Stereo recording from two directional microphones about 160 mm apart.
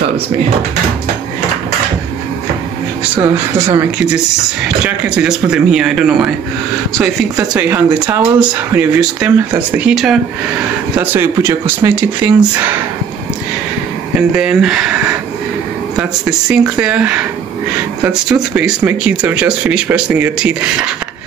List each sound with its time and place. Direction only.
3.2 s speech: 20° right (ahead or behind)
4.8 s speech: 5° right (ahead or behind)
7.5 s speech: 10° right (ahead or behind)
14.3 s speech: 5° right (ahead or behind)
16.4 s speech: 5° right (ahead or behind)